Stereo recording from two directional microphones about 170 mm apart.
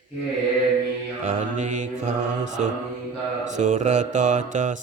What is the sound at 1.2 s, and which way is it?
Mantra, 45° right (ahead or behind).